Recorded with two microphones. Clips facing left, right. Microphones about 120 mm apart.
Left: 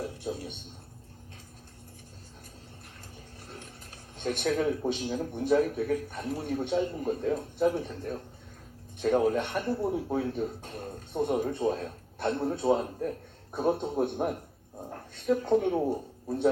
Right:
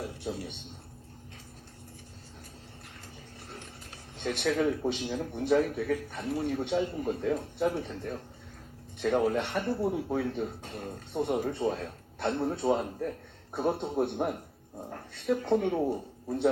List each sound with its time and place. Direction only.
0.0 s a man's voice: 45° left (ahead or behind)
4.2 s a man's voice: 45° left (ahead or behind)